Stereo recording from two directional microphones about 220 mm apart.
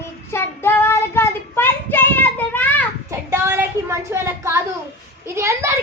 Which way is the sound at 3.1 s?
10° right (ahead or behind).